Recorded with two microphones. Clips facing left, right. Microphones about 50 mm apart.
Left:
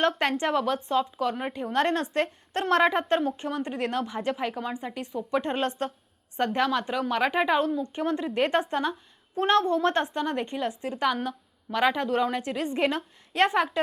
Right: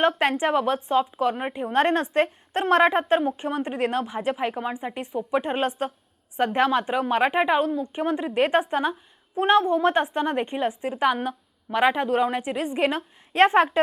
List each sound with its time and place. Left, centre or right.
0.2 s a woman's voice: centre
13.3 s a woman's voice: right